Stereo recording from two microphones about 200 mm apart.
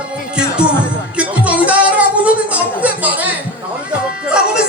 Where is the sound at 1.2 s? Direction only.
5° right (ahead or behind).